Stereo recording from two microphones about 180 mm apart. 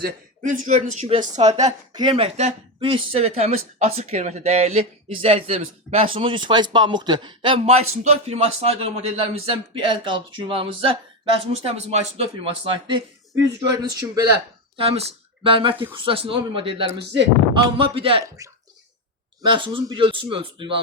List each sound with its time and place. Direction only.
0.0 s speech: 45° right (ahead or behind)
1.9 s speech: 25° right (ahead or behind)
14.8 s speech: 35° right (ahead or behind)
18.4 s speech: 20° right (ahead or behind)